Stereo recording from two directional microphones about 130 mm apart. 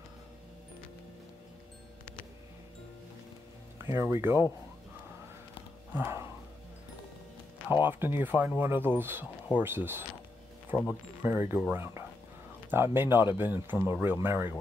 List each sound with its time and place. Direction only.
3.7 s speech: 20° right (ahead or behind)
5.9 s speech: 15° right (ahead or behind)
7.7 s speech: 15° right (ahead or behind)